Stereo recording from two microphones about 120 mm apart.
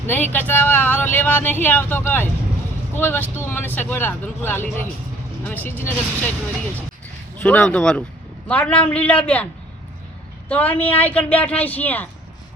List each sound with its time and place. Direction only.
0.1 s speech: 15° left (ahead or behind)
7.4 s speech: 10° left (ahead or behind)
10.5 s speech: 15° left (ahead or behind)